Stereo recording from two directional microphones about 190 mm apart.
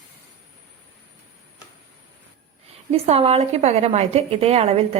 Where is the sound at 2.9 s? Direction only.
30° right (ahead or behind).